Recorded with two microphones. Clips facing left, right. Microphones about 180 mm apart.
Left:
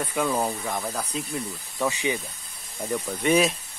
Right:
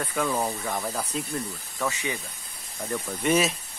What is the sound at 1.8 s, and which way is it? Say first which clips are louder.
Speech: left 4 dB; 15° left (ahead or behind).